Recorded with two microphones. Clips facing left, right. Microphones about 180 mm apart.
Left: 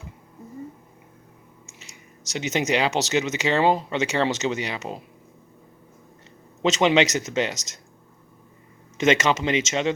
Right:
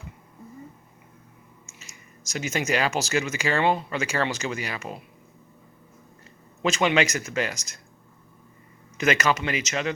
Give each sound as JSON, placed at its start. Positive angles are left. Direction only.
{"t": 2.3, "sound": "speech", "side_deg": 20}
{"t": 6.6, "sound": "speech", "side_deg": 25}
{"t": 9.0, "sound": "speech", "side_deg": 25}